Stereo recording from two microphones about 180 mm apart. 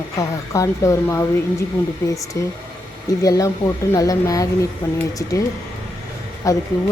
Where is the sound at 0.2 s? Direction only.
20° left (ahead or behind).